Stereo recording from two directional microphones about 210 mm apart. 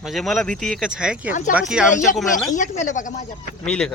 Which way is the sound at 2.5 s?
35° left (ahead or behind).